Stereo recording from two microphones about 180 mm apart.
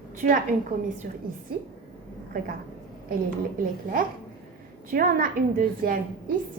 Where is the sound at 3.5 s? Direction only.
50° right (ahead or behind).